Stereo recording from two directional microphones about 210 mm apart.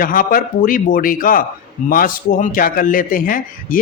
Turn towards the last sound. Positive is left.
turn(degrees=40)  # may be behind; listen again after turning